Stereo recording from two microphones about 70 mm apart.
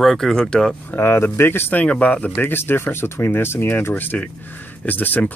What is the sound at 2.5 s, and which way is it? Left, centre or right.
Speech, left.